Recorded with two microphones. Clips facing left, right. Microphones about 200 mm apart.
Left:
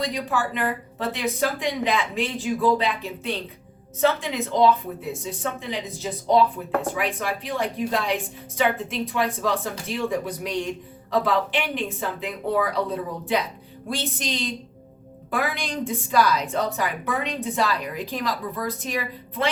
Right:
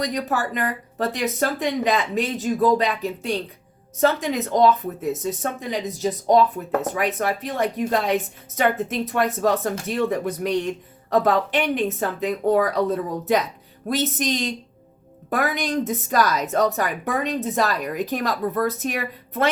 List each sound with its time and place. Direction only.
0.0 s a woman's voice: 45° right (ahead or behind)